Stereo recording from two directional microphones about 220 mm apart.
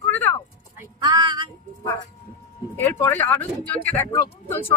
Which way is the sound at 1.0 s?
20° right (ahead or behind).